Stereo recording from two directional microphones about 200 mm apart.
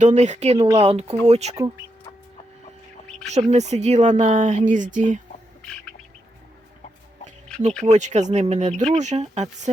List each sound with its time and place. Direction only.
0.0 s speech: 35° right (ahead or behind)
1.5 s speech: 15° right (ahead or behind)
3.5 s speech: 35° right (ahead or behind)
7.9 s speech: 35° right (ahead or behind)